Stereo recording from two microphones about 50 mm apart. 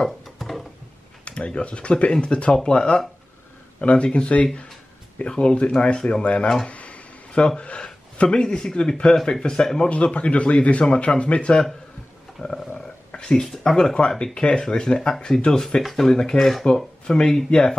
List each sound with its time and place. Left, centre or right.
0.4 s a sound: centre
1.2 s a man's voice: left
9.8 s a man's voice: left
12.4 s a sound: centre
13.3 s speech: centre
13.7 s speech: centre
15.6 s speech: centre